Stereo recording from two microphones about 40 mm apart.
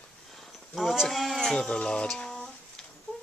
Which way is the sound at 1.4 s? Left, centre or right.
Centre.